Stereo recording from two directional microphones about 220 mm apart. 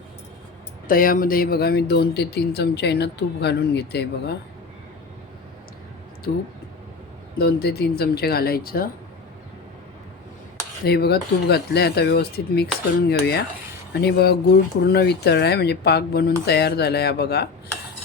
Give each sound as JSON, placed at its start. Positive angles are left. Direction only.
{"t": 0.9, "sound": "speech", "side_deg": 40}
{"t": 6.3, "sound": "speech", "side_deg": 45}
{"t": 10.8, "sound": "speech", "side_deg": 45}